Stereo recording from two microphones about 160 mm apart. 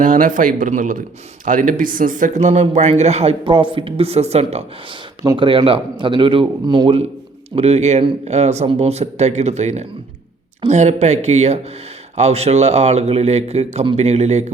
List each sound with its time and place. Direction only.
0.0 s a man's voice: 55° right (ahead or behind)
5.2 s speech: 25° right (ahead or behind)
7.5 s speech: 40° right (ahead or behind)